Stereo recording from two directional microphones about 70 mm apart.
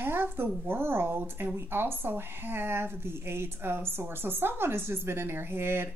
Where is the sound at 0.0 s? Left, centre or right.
Right.